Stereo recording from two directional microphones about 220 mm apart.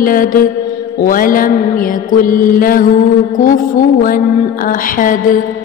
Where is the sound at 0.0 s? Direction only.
40° left (ahead or behind).